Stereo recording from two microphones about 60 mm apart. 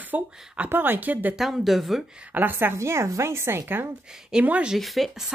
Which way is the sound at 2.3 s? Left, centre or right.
Right.